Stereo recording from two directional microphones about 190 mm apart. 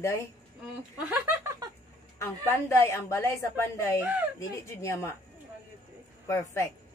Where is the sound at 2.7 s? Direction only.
15° left (ahead or behind).